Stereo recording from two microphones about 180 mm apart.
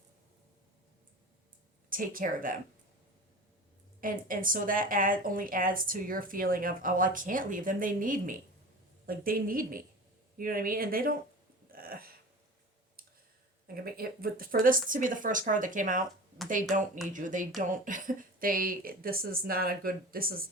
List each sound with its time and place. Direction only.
1.9 s speech: 50° right (ahead or behind)
4.0 s speech: 50° right (ahead or behind)
11.7 s a sound: 55° right (ahead or behind)
13.7 s speech: 55° right (ahead or behind)
17.1 s speech: 45° right (ahead or behind)